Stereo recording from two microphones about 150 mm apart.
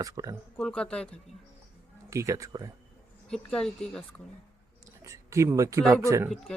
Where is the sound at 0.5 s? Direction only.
5° left (ahead or behind).